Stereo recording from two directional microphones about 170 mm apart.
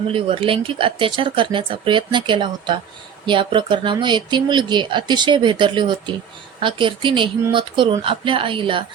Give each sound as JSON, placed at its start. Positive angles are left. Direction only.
{"t": 0.1, "sound": "speech", "side_deg": -30}